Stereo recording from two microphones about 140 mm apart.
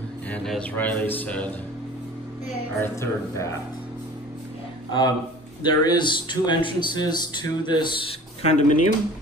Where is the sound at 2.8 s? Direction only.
20° left (ahead or behind).